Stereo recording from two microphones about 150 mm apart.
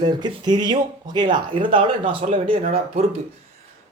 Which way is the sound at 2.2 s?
45° right (ahead or behind).